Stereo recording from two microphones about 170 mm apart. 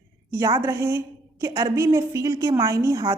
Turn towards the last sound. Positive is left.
turn(degrees=-20)  # may be behind; listen again after turning